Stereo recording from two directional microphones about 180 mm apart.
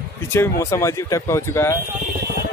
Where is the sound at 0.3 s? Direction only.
15° left (ahead or behind).